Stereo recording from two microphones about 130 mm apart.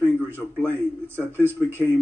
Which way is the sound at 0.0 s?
10° left (ahead or behind).